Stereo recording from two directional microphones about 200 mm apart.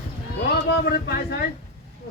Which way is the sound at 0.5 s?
50° left (ahead or behind).